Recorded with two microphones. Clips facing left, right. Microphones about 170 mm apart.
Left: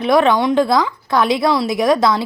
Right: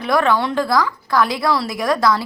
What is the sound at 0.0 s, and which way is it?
A woman's voice, 20° left (ahead or behind).